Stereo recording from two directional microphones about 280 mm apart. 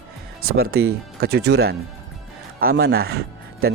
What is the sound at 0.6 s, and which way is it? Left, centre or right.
Speech, right.